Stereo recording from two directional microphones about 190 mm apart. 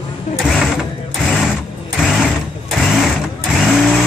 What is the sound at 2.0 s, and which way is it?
Sewing machine, centre (ahead or behind).